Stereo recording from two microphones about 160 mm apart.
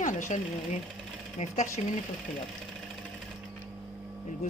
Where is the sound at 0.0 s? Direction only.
50° left (ahead or behind).